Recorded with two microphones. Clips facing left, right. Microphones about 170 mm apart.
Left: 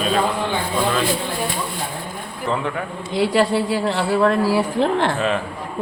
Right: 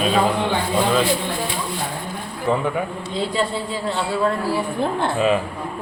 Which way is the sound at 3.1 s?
75° left (ahead or behind).